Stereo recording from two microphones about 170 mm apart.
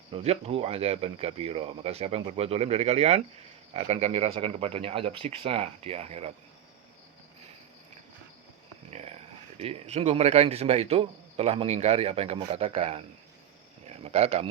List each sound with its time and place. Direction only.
0.1 s a man's voice: 35° right (ahead or behind)
8.9 s a sound: 40° right (ahead or behind)
9.6 s a man's voice: 35° right (ahead or behind)